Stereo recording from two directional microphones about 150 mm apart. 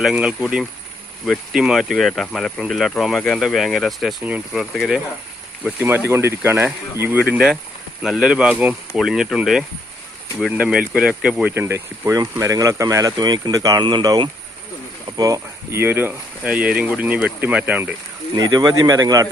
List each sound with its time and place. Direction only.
0.0 s speech: 5° right (ahead or behind)
4.2 s speech: 10° right (ahead or behind)
5.8 s speech: 15° right (ahead or behind)
11.6 s speech: 20° right (ahead or behind)
18.3 s speech: 25° right (ahead or behind)